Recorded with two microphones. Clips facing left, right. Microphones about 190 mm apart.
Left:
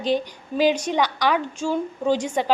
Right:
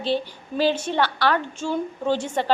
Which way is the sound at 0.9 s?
10° left (ahead or behind).